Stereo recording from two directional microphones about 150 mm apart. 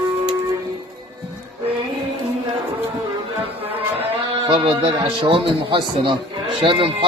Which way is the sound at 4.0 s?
35° right (ahead or behind).